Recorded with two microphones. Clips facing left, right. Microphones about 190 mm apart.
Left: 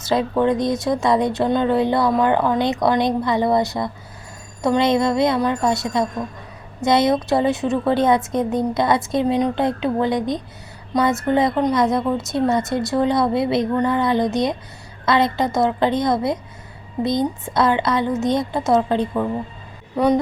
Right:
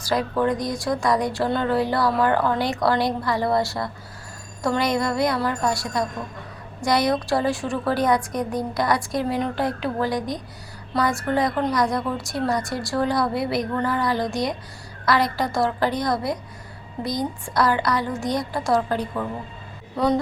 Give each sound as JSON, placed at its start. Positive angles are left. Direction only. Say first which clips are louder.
{"t": 0.0, "sound": "speech", "louder": "left 4 dB", "side_deg": 25}